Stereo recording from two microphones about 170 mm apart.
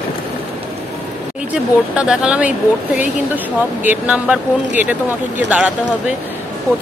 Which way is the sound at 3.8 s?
10° right (ahead or behind).